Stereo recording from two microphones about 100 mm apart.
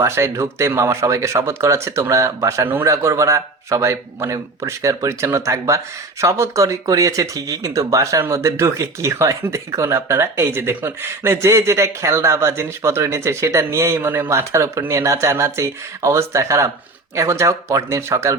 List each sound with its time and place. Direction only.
0.0 s speech: 30° right (ahead or behind)
2.6 s speech: 20° right (ahead or behind)
2.9 s speech: 30° right (ahead or behind)